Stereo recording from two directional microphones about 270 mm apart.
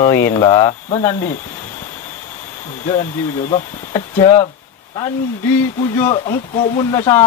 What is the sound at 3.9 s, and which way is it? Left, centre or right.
Speech, centre.